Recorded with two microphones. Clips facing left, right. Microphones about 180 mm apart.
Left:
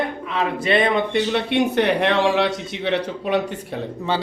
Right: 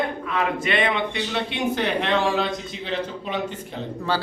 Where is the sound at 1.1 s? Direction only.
55° left (ahead or behind).